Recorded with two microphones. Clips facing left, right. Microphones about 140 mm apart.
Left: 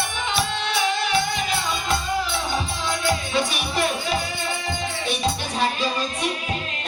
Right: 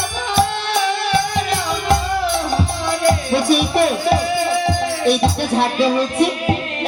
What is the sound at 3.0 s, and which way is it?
Music, 60° right (ahead or behind).